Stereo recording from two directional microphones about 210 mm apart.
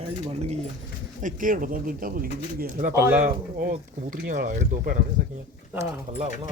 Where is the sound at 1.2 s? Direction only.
40° right (ahead or behind).